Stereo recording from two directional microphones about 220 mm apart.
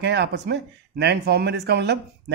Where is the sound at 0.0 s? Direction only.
50° right (ahead or behind).